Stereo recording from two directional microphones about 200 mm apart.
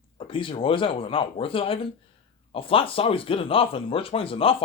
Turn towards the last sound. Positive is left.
turn(degrees=25)  # may be behind; listen again after turning